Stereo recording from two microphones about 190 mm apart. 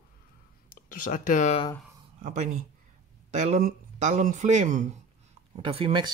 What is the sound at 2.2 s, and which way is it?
Speech, 40° right (ahead or behind).